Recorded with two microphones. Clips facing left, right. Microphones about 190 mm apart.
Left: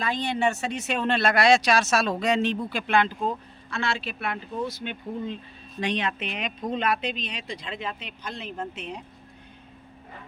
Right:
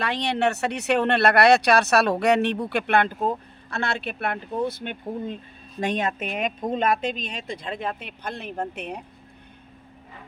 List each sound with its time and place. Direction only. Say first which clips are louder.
0.0 s speech: right 2 dB; 70° right (ahead or behind)